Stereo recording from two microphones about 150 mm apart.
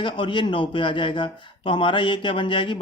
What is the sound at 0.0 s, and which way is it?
A man's voice, 35° left (ahead or behind).